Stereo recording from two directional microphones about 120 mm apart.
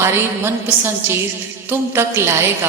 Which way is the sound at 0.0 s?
20° right (ahead or behind).